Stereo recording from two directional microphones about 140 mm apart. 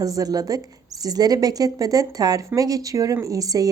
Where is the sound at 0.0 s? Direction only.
25° right (ahead or behind).